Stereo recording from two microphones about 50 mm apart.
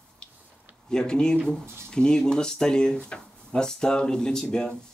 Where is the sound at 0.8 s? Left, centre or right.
Centre.